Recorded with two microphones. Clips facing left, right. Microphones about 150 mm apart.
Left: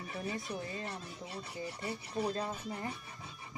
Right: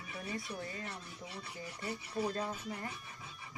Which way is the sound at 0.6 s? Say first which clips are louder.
Left 2 dB; 25° left (ahead or behind).